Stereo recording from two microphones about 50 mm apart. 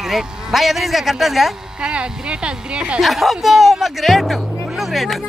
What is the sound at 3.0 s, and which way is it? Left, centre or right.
A man's voice, centre.